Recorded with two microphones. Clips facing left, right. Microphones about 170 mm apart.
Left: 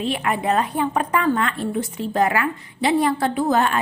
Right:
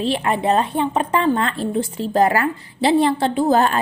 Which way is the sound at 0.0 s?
30° right (ahead or behind).